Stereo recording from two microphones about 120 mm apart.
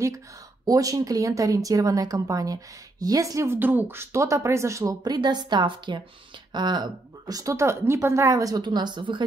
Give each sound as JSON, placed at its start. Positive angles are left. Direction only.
{"t": 0.7, "sound": "a woman's voice", "side_deg": -30}